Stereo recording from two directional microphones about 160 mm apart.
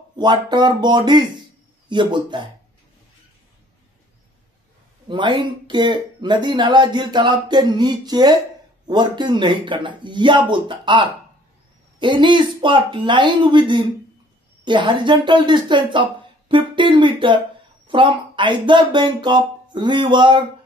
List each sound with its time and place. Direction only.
0.2 s speech: 25° right (ahead or behind)
5.0 s speech: 30° right (ahead or behind)